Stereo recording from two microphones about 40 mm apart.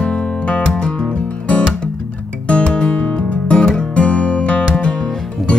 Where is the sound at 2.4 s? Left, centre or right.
Left.